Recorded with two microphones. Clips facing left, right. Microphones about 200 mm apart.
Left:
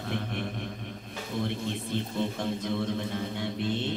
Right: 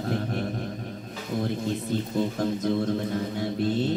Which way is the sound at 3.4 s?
40° right (ahead or behind).